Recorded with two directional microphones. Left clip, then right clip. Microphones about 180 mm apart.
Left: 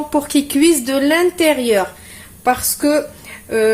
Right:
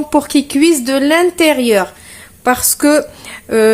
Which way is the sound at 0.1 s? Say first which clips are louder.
Right 4 dB; 25° right (ahead or behind).